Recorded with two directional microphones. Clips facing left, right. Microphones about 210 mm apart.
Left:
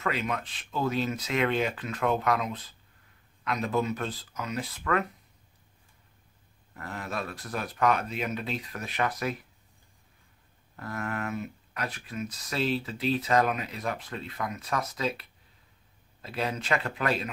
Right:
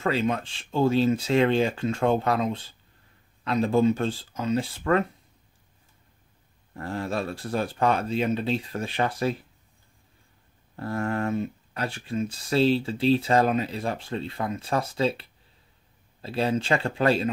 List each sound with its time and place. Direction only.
0.0 s speech: 30° right (ahead or behind)
6.7 s speech: 30° right (ahead or behind)
10.8 s speech: 30° right (ahead or behind)